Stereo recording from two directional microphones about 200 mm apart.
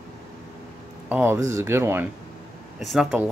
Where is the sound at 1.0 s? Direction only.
10° right (ahead or behind).